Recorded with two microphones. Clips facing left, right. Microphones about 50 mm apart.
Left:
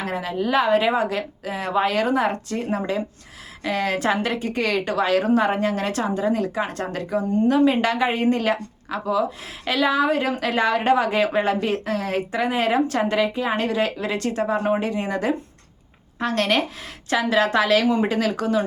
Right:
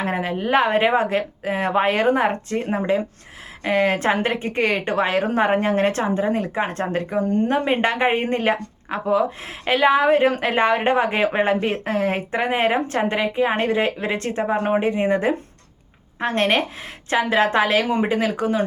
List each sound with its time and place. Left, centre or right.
0.0 s a woman's voice: right